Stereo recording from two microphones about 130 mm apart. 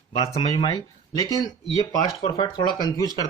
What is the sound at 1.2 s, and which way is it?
Speech, 25° left (ahead or behind).